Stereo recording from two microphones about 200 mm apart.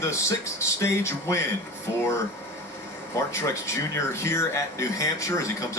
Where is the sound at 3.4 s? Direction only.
15° left (ahead or behind).